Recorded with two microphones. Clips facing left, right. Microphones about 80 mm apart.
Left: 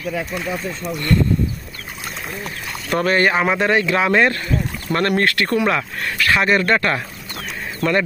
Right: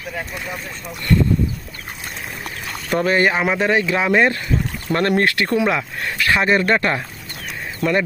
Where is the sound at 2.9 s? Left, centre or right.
Centre.